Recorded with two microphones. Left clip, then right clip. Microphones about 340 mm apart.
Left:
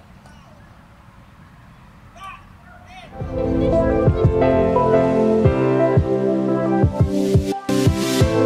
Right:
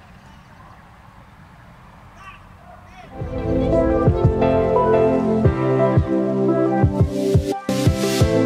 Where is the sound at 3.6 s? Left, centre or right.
Centre.